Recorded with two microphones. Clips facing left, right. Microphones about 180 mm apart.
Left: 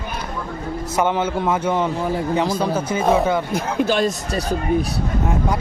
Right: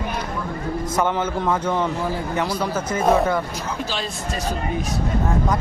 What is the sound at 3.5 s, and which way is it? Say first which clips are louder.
Speech: left 8 dB; 55° left (ahead or behind).